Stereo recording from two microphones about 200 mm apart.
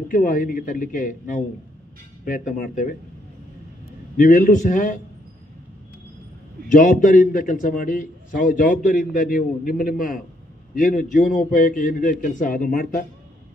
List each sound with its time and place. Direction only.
0.1 s a man's voice: 40° left (ahead or behind)
4.2 s a man's voice: 40° left (ahead or behind)
6.7 s a man's voice: 40° left (ahead or behind)